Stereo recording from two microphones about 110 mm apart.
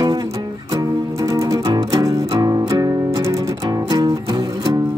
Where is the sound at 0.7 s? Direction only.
30° right (ahead or behind).